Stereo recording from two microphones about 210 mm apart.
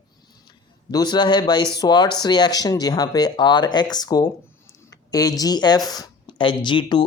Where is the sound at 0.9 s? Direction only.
20° left (ahead or behind).